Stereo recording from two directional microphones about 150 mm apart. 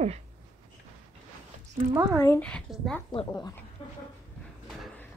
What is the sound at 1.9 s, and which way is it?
Speech, 20° right (ahead or behind).